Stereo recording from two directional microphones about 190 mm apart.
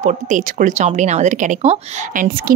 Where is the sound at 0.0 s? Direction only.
40° right (ahead or behind).